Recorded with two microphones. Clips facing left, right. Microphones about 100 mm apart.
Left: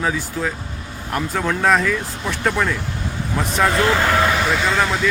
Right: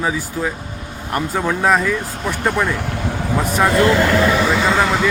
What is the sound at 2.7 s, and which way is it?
Vehicle, 70° right (ahead or behind).